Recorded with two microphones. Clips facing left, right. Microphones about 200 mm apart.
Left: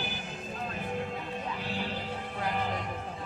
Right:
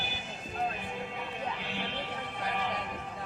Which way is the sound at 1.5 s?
40° left (ahead or behind).